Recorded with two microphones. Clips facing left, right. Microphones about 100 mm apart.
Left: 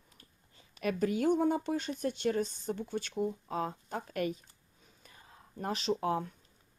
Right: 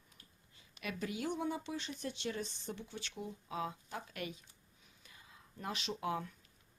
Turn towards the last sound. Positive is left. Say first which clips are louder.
# left 7 dB
turn(degrees=35)  # may be behind; listen again after turning